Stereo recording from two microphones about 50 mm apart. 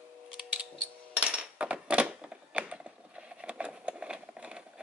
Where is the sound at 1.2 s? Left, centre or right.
Right.